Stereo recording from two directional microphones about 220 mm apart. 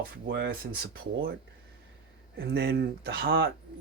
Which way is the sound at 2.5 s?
50° right (ahead or behind).